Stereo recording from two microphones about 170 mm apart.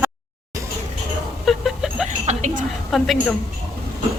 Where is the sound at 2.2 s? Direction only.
45° right (ahead or behind).